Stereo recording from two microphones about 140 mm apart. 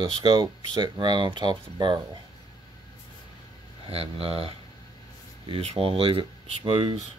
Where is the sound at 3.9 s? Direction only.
45° right (ahead or behind).